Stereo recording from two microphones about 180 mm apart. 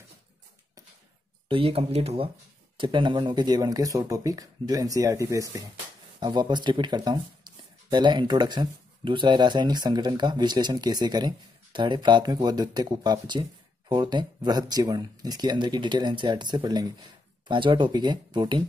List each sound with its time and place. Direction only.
1.5 s speech: 30° right (ahead or behind)